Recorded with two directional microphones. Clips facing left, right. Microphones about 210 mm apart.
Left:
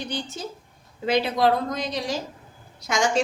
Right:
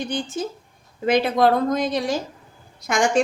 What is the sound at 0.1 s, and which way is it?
A woman's voice, 50° right (ahead or behind).